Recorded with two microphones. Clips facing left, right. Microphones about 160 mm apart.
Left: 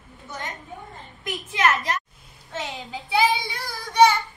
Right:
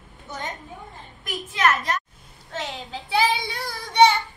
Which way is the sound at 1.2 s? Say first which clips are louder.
Left 1 dB; centre (ahead or behind).